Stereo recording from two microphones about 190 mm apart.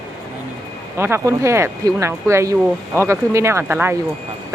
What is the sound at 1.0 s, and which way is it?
Speech, 15° right (ahead or behind).